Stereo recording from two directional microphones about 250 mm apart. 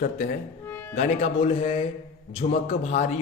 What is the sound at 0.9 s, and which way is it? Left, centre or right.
Speech, left.